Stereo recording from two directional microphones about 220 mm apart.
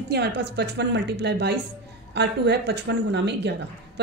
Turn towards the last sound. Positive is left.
turn(degrees=-50)  # may be behind; listen again after turning